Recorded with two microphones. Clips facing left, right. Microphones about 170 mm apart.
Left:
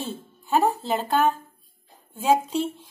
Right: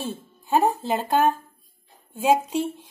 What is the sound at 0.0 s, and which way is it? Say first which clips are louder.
A woman's voice: right 1 dB; 15° right (ahead or behind).